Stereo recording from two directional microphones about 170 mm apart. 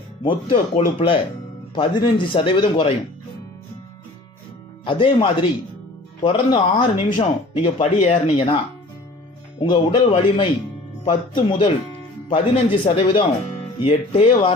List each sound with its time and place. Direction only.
0.3 s speech: 30° left (ahead or behind)
4.9 s speech: 30° left (ahead or behind)
9.6 s speech: 30° left (ahead or behind)
12.8 s speech: 30° left (ahead or behind)